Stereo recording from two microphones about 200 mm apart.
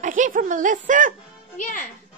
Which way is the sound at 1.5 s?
40° left (ahead or behind).